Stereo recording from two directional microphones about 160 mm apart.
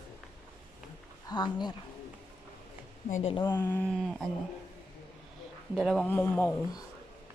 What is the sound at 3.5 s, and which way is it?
Speech, 10° left (ahead or behind).